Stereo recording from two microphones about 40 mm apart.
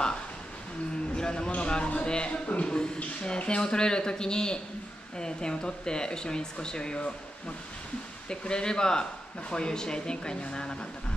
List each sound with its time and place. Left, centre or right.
1.1 s a sound: centre
5.1 s speech: left
8.3 s speech: left